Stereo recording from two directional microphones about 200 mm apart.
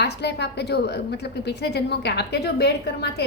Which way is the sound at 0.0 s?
55° left (ahead or behind).